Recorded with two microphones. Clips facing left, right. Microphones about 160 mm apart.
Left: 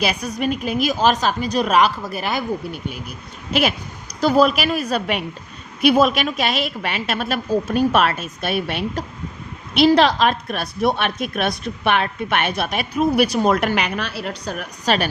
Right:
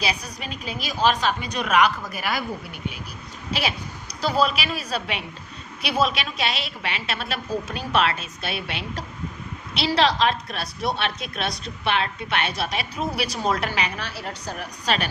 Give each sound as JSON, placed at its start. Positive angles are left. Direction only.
{"t": 0.0, "sound": "a woman's voice", "side_deg": 55}
{"t": 4.2, "sound": "a woman's voice", "side_deg": 50}